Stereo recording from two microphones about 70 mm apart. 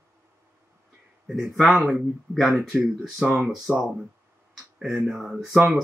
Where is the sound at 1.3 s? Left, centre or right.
Centre.